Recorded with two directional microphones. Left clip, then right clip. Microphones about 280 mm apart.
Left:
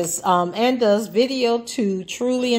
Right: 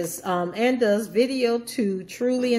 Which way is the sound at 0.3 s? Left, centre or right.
Centre.